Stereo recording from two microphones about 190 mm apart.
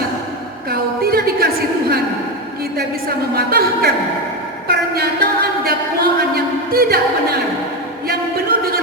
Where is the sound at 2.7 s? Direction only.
55° right (ahead or behind).